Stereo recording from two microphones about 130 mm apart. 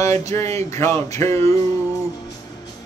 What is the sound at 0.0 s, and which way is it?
A man's voice, 20° left (ahead or behind).